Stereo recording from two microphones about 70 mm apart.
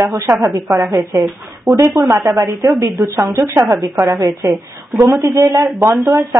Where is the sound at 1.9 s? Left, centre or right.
Right.